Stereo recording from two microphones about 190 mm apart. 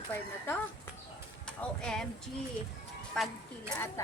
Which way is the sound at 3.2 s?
5° left (ahead or behind).